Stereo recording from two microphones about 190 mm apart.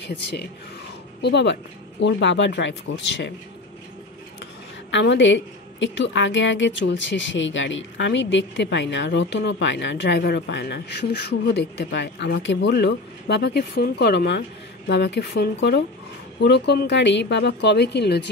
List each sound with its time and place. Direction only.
1.2 s a woman's voice: 65° left (ahead or behind)
4.9 s a woman's voice: 75° left (ahead or behind)